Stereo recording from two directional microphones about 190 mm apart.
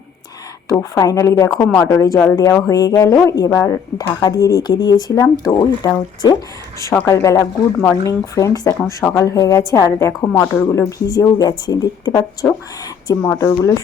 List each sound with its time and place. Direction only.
0.7 s a woman's voice: 15° left (ahead or behind)